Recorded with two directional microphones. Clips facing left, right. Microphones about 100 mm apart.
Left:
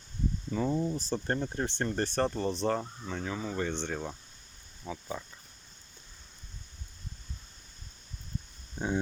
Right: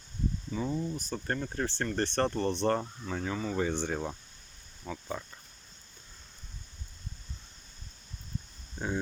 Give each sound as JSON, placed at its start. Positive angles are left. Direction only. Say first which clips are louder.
{"t": 0.5, "sound": "speech", "louder": "left 4 dB", "side_deg": 50}
{"t": 0.9, "sound": "speech", "louder": "left 3 dB", "side_deg": 30}
{"t": 1.4, "sound": "speech", "louder": "left 1 dB", "side_deg": 20}
{"t": 2.0, "sound": "speech", "louder": "right 1 dB", "side_deg": 5}
{"t": 4.8, "sound": "speech", "louder": "even", "side_deg": 5}
{"t": 8.8, "sound": "a sound", "louder": "left 2 dB", "side_deg": 15}